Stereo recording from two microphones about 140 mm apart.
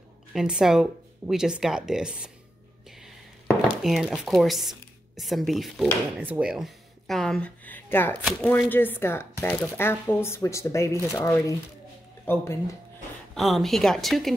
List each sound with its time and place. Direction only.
0.3 s speech: 5° right (ahead or behind)
3.4 s speech: centre (ahead or behind)
13.3 s speech: centre (ahead or behind)